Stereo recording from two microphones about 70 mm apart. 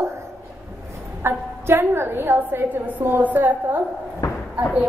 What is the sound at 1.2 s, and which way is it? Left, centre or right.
A woman's voice, right.